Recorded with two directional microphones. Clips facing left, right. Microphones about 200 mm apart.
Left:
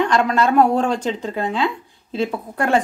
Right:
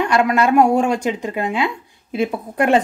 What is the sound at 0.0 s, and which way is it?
A woman's voice, 10° right (ahead or behind).